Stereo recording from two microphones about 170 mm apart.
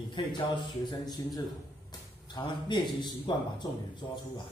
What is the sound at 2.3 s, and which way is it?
Speech, 25° left (ahead or behind).